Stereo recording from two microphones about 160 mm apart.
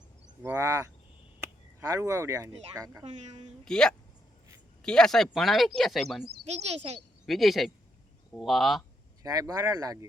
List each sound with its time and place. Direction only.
0.4 s speech: 15° right (ahead or behind)
1.9 s speech: 20° right (ahead or behind)
3.0 s speech: 40° right (ahead or behind)
3.6 s speech: 5° left (ahead or behind)
6.4 s speech: 40° right (ahead or behind)
7.3 s speech: centre (ahead or behind)
9.2 s speech: 20° right (ahead or behind)